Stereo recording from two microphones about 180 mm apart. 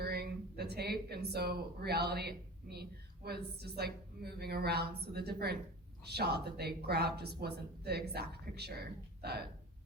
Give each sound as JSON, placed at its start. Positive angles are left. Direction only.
{"t": 0.0, "sound": "speech", "side_deg": -60}